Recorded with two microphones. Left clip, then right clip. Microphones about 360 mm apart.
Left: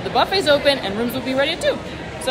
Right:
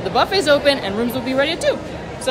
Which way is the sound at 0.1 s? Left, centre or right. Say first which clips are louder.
Right 1 dB; centre.